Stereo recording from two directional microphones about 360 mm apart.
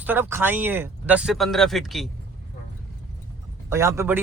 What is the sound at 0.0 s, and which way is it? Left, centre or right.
Speech, centre.